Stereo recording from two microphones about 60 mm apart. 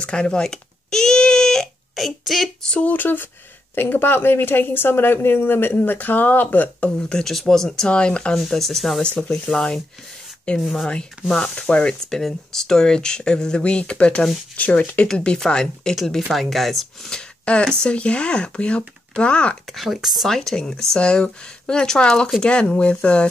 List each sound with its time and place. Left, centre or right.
0.0 s a sound: centre
2.8 s speech: left
7.0 s speech: centre
8.4 s speech: centre
9.0 s speech: centre
16.0 s speech: centre
17.1 s speech: centre
19.6 s speech: centre